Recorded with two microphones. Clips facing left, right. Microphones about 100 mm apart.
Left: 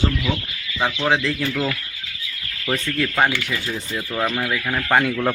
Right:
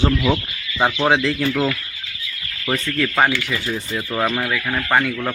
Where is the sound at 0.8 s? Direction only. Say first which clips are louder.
Right 4 dB; 30° right (ahead or behind).